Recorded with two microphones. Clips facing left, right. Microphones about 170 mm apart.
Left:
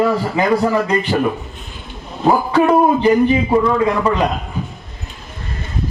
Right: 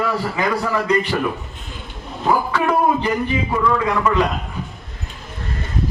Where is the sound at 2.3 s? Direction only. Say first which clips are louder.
Left 5 dB; 30° left (ahead or behind).